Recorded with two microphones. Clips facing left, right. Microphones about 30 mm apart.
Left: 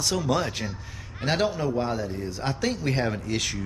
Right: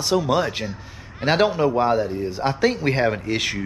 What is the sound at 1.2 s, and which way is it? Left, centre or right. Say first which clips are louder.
Speech: right 7 dB; right.